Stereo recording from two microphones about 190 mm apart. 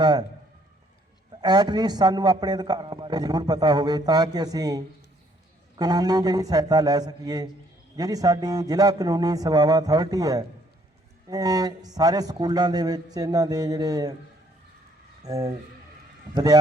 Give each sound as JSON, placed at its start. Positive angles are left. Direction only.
{"t": 0.0, "sound": "a man's voice", "side_deg": -25}
{"t": 1.3, "sound": "a man's voice", "side_deg": -20}
{"t": 15.2, "sound": "a man's voice", "side_deg": -20}